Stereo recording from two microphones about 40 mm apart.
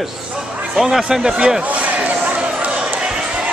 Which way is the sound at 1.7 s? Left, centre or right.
Right.